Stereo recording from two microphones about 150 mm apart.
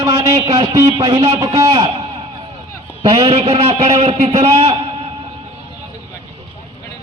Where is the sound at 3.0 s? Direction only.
35° right (ahead or behind).